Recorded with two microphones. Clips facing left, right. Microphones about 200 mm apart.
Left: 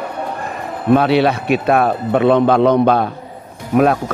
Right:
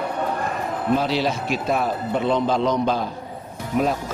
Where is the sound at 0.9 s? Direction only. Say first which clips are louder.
Left 9 dB; 65° left (ahead or behind).